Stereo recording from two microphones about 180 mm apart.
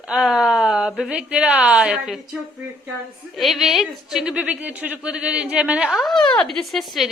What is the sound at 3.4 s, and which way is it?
A woman's voice, centre (ahead or behind).